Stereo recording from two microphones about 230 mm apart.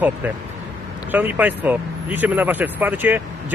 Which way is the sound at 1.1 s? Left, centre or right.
Centre.